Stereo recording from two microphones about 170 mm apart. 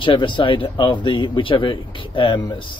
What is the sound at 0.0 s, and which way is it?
Speech, 30° left (ahead or behind).